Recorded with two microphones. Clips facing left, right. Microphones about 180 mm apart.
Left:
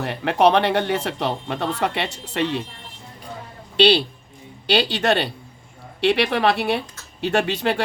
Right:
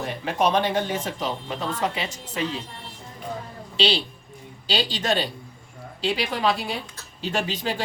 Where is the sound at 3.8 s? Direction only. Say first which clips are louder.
Left 8 dB; 65° left (ahead or behind).